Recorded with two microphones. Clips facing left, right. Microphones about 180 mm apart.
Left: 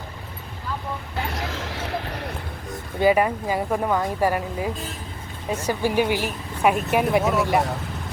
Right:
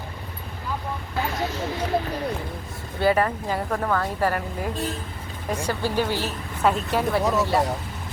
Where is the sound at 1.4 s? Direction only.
90° left.